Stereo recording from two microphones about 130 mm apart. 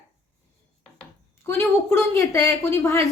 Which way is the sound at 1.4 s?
20° left (ahead or behind).